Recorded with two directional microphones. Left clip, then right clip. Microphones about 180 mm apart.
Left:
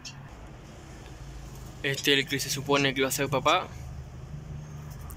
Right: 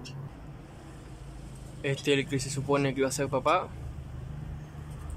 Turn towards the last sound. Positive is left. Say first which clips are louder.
# left 2 dB
turn(degrees=-5)  # may be behind; listen again after turning